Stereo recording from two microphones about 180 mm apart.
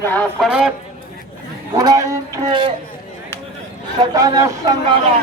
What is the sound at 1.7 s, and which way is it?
A man's voice, 20° right (ahead or behind).